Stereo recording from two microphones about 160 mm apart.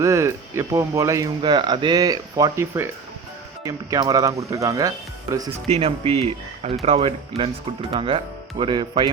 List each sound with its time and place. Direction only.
0.0 s speech: 20° right (ahead or behind)
5.6 s speech: 40° right (ahead or behind)